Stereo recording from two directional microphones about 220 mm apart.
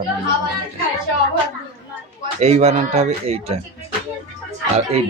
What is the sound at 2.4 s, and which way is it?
A woman's voice, 30° right (ahead or behind).